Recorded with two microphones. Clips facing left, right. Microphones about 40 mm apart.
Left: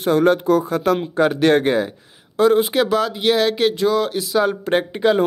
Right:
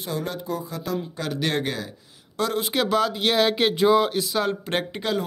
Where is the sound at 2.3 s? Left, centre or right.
Centre.